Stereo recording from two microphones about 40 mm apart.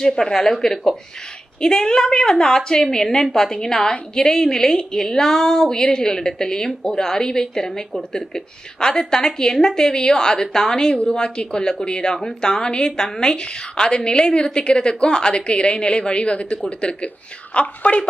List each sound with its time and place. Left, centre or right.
0.0 s a woman's voice: centre; by 18.0 s left